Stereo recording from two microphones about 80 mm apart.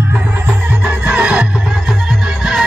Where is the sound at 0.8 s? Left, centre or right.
Centre.